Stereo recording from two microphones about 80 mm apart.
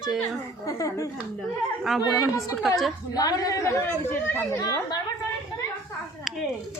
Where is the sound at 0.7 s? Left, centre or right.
Left.